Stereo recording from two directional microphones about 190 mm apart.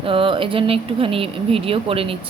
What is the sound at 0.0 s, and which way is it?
A woman's voice, 30° right (ahead or behind).